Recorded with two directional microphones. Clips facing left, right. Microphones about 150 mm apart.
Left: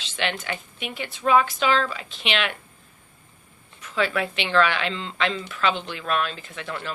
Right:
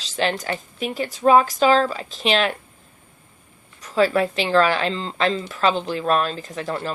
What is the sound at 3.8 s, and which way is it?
A woman's voice, 40° right (ahead or behind).